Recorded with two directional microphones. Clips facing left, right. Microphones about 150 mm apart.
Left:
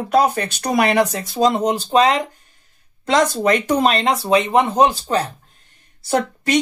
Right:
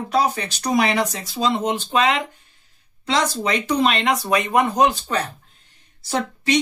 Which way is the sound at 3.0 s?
50° left (ahead or behind).